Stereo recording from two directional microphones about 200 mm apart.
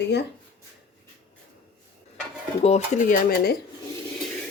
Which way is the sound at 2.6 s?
35° left (ahead or behind).